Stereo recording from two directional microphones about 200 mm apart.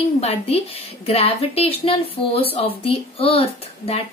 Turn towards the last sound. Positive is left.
turn(degrees=30)  # may be behind; listen again after turning